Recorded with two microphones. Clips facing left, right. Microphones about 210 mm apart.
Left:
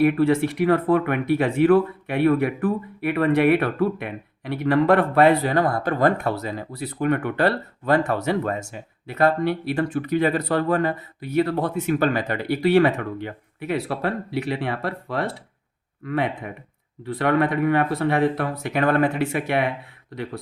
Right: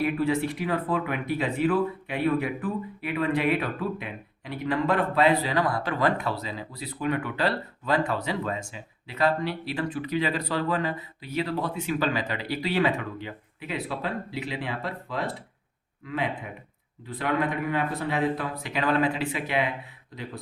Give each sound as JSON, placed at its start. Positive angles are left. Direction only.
{"t": 0.0, "sound": "speech", "side_deg": 60}